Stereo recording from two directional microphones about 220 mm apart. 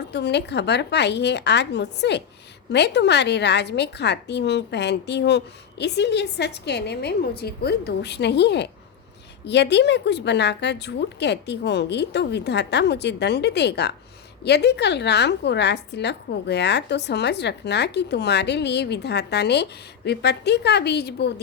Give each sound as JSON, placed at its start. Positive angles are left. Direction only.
{"t": 0.1, "sound": "a woman's voice", "side_deg": 50}